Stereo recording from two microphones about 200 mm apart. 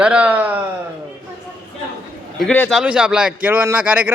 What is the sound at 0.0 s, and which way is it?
Speech, 5° right (ahead or behind).